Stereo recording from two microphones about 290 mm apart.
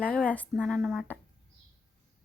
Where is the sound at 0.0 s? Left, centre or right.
Centre.